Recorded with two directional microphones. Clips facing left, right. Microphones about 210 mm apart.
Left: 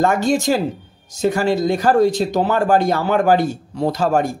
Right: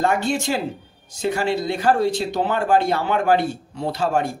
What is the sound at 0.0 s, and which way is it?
Speech, 40° left (ahead or behind).